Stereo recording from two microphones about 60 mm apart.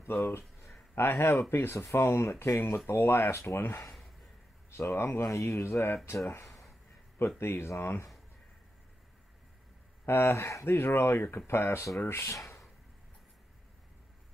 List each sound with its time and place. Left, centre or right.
0.0 s a sound: left
0.9 s speech: left
2.9 s speech: left
4.6 s speech: left
7.2 s speech: left
10.0 s speech: left